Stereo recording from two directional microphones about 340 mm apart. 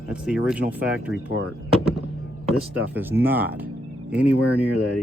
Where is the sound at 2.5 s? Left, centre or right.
Centre.